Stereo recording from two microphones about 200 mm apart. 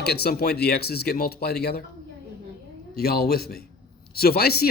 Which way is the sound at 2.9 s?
50° left (ahead or behind).